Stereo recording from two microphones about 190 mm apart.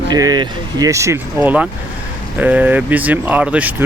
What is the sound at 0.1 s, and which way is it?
Speech, 20° right (ahead or behind).